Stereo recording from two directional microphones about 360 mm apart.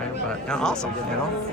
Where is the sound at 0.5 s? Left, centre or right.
Centre.